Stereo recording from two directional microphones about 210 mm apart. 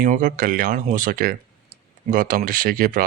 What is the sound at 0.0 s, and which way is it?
Speech, 40° right (ahead or behind).